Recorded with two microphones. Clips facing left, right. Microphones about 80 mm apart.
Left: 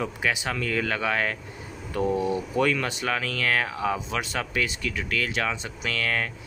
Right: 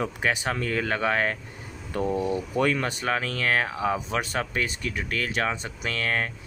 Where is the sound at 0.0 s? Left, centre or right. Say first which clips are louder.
Right 1 dB; right.